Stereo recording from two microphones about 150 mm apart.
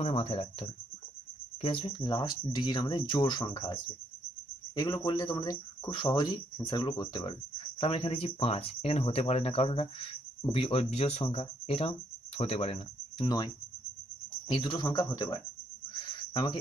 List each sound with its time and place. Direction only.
0.0 s speech: 40° left (ahead or behind)
14.5 s speech: 30° left (ahead or behind)
15.9 s cricket: 35° left (ahead or behind)